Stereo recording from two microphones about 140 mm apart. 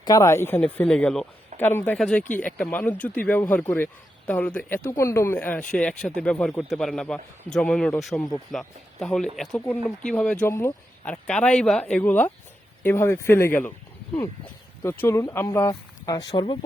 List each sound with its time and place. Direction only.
0.0 s speech: 25° left (ahead or behind)
14.8 s speech: 20° left (ahead or behind)